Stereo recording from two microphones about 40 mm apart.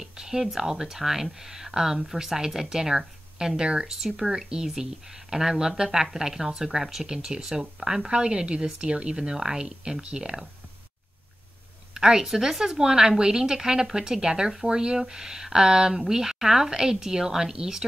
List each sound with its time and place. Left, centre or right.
0.0 s a sound: centre
0.6 s speech: centre
11.9 s speech: centre